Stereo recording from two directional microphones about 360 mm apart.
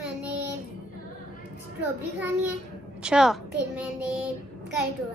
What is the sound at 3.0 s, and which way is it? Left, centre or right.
Speech, centre.